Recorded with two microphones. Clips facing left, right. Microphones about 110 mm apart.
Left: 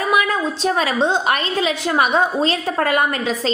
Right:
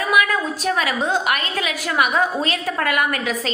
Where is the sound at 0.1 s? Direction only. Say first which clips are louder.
Even; 25° left (ahead or behind).